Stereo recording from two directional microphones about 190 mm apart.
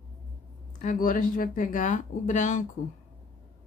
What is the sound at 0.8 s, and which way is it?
Speech, 45° left (ahead or behind).